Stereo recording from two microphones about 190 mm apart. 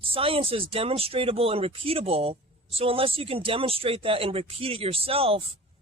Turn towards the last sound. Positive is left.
turn(degrees=-30)  # may be behind; listen again after turning